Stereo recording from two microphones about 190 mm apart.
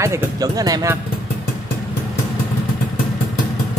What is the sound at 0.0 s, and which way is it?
Speech, 15° right (ahead or behind).